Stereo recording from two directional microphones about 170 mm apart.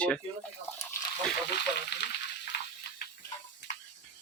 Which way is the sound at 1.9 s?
75° left (ahead or behind).